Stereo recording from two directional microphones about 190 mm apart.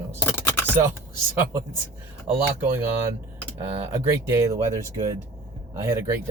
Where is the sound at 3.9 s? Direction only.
15° right (ahead or behind).